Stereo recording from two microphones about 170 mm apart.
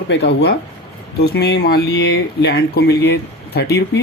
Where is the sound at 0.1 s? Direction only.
75° left (ahead or behind).